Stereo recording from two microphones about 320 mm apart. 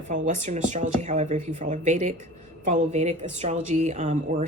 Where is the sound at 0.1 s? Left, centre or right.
Right.